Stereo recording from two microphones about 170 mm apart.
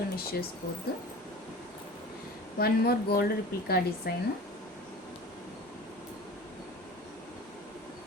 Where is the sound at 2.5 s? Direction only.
65° left (ahead or behind).